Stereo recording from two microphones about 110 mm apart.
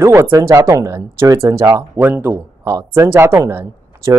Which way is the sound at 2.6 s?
30° right (ahead or behind).